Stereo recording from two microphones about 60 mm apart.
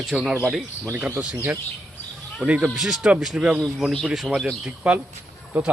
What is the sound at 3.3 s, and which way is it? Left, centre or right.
Speech, right.